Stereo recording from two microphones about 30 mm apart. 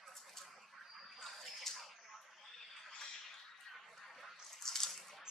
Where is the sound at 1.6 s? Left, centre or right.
Centre.